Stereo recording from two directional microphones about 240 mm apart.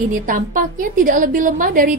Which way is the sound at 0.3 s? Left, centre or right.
Right.